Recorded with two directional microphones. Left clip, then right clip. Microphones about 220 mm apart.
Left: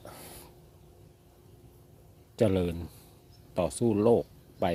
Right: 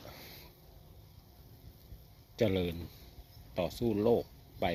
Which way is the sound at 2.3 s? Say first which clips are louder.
Left 5 dB; 25° left (ahead or behind).